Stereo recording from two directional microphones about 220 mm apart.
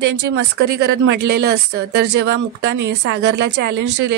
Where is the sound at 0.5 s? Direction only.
50° right (ahead or behind).